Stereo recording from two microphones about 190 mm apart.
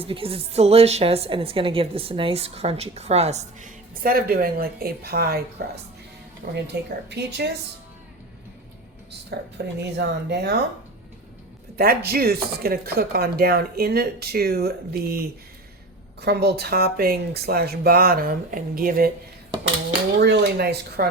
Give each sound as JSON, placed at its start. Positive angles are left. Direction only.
{"t": 0.0, "sound": "a woman's voice", "side_deg": -30}
{"t": 6.4, "sound": "speech", "side_deg": -45}
{"t": 7.1, "sound": "speech", "side_deg": -60}
{"t": 9.3, "sound": "speech", "side_deg": -60}
{"t": 11.8, "sound": "speech", "side_deg": -55}
{"t": 20.1, "sound": "speech", "side_deg": -60}